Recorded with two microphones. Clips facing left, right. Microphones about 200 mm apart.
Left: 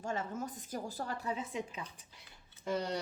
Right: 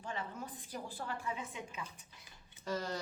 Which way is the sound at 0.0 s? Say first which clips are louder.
Left 5 dB; 45° left (ahead or behind).